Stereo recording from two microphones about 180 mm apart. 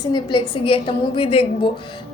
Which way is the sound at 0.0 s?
25° left (ahead or behind).